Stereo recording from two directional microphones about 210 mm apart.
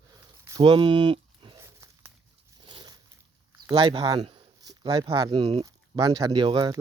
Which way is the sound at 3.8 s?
25° right (ahead or behind).